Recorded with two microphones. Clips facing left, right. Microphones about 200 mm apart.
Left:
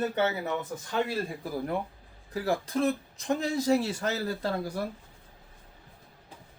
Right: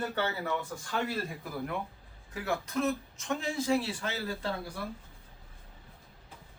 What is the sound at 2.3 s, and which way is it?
Speech, 35° left (ahead or behind).